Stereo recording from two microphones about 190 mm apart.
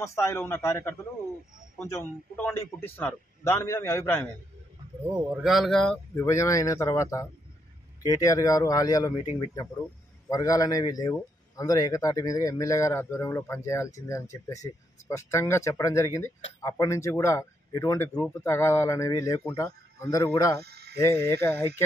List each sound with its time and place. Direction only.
0.0 s speech: 15° left (ahead or behind)
5.1 s speech: 5° right (ahead or behind)
6.1 s speech: 15° left (ahead or behind)
10.3 s speech: 20° left (ahead or behind)
20.6 s sheep: 55° right (ahead or behind)
21.0 s speech: 15° left (ahead or behind)